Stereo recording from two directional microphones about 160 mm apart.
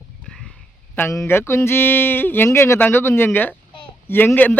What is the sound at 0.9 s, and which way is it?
A man's voice, 15° left (ahead or behind).